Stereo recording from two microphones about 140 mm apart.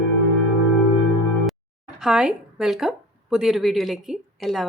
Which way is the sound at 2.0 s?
5° right (ahead or behind).